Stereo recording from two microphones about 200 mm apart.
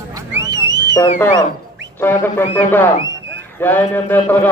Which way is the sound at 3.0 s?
70° right (ahead or behind).